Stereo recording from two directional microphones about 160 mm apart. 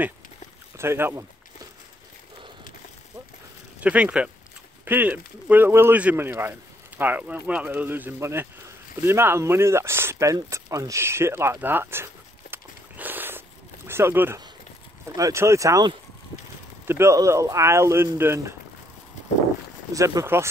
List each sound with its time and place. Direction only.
0.7 s a sound: 15° right (ahead or behind)
3.8 s speech: 10° right (ahead or behind)
19.9 s speech: 20° right (ahead or behind)